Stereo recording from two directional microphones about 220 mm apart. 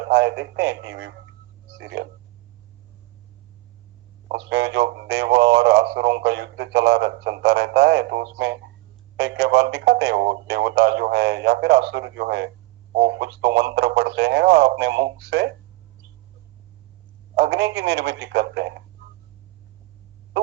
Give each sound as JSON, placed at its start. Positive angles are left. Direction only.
{"t": 0.0, "sound": "speech", "side_deg": -50}
{"t": 4.3, "sound": "speech", "side_deg": -50}
{"t": 17.3, "sound": "speech", "side_deg": -50}